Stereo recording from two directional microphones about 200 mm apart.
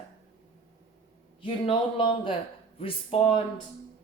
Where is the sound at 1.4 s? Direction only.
25° left (ahead or behind).